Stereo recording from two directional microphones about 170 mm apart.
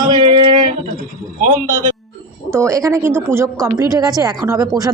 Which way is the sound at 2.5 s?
15° right (ahead or behind).